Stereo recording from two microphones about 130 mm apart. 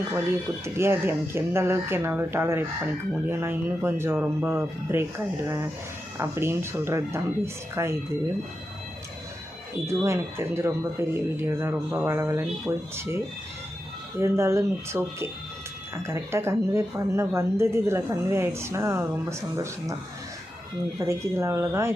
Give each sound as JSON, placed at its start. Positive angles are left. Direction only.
{"t": 0.1, "sound": "speech", "side_deg": -20}
{"t": 6.1, "sound": "speech", "side_deg": -20}
{"t": 9.8, "sound": "speech", "side_deg": -20}
{"t": 14.2, "sound": "speech", "side_deg": -20}
{"t": 21.0, "sound": "speech", "side_deg": -20}